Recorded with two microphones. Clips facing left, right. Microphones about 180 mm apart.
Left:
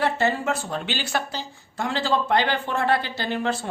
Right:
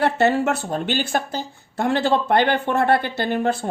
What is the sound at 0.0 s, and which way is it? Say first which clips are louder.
Speech: right 5 dB; 65° right (ahead or behind).